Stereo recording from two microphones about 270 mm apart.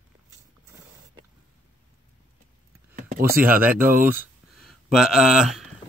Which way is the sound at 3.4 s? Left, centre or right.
Centre.